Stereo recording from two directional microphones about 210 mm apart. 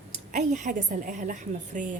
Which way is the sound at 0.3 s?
35° right (ahead or behind).